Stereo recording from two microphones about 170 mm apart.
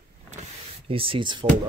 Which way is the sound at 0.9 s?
30° right (ahead or behind).